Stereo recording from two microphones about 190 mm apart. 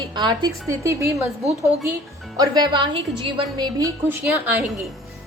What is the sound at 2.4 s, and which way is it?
A woman's voice, 20° right (ahead or behind).